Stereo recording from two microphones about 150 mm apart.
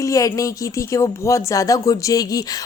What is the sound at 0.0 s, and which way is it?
A woman's voice, 20° left (ahead or behind).